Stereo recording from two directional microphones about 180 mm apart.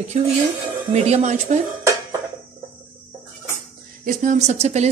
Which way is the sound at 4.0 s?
45° right (ahead or behind).